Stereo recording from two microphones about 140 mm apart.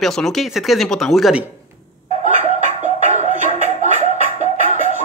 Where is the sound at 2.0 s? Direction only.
55° right (ahead or behind).